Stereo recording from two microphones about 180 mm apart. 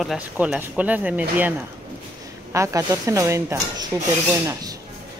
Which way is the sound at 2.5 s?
15° right (ahead or behind).